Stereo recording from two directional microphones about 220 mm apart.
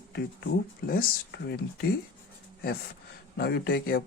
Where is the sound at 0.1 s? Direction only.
50° left (ahead or behind).